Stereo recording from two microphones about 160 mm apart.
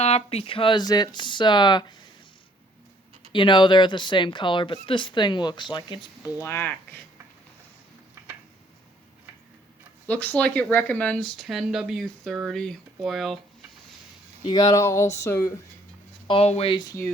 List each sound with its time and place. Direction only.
0.0 s speech: 40° left (ahead or behind)
3.3 s speech: 30° left (ahead or behind)
6.4 s speech: 15° left (ahead or behind)
10.1 s speech: 10° left (ahead or behind)
14.4 s speech: 25° left (ahead or behind)
16.2 s speech: 35° left (ahead or behind)